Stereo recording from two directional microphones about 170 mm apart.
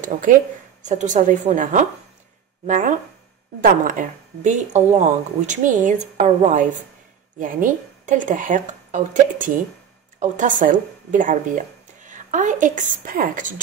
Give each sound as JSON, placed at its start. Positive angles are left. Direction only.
{"t": 0.0, "sound": "a woman's voice", "side_deg": -50}